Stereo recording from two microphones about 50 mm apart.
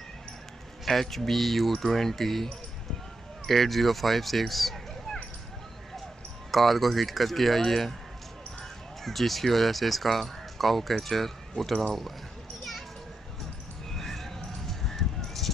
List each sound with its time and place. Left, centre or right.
0.8 s speech: centre
6.5 s speech: centre
9.0 s speech: centre
13.8 s a sound: centre